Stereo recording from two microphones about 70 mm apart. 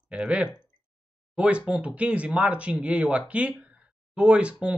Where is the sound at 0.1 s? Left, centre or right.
Centre.